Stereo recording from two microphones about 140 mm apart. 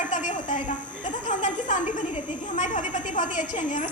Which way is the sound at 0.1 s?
60° left (ahead or behind).